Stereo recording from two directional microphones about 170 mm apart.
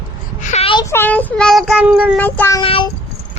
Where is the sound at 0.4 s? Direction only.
40° left (ahead or behind).